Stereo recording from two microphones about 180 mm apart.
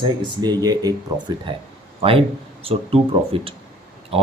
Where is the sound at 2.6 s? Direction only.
30° right (ahead or behind).